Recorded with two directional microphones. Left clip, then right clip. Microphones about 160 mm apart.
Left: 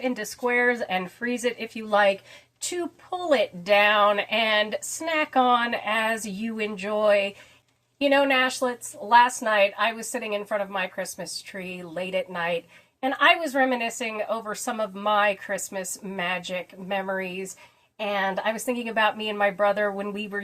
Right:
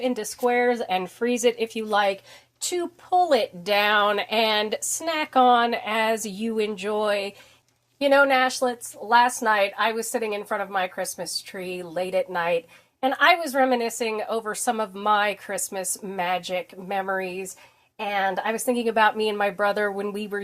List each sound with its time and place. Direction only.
0.0 s a woman's voice: 40° right (ahead or behind)
18.1 s a woman's voice: 40° right (ahead or behind)